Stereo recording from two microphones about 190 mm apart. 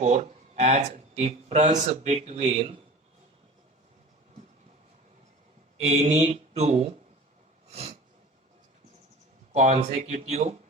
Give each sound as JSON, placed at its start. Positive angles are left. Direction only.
{"t": 0.0, "sound": "speech", "side_deg": -40}
{"t": 5.9, "sound": "speech", "side_deg": -35}
{"t": 7.7, "sound": "a sound", "side_deg": -35}
{"t": 9.5, "sound": "speech", "side_deg": -35}